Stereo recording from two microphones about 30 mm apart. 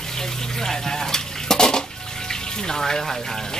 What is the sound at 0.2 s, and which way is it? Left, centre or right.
Speech, centre.